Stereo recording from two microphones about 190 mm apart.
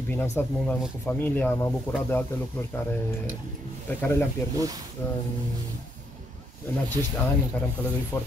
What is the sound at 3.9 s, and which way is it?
Speech, 10° left (ahead or behind).